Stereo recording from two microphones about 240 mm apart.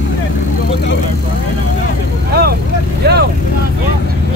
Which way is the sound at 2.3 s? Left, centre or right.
Right.